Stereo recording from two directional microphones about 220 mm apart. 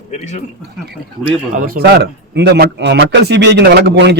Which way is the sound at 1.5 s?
40° right (ahead or behind).